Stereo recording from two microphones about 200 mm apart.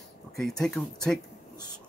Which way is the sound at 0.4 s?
5° left (ahead or behind).